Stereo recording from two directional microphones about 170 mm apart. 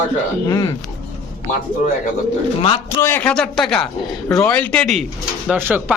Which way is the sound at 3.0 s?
10° left (ahead or behind).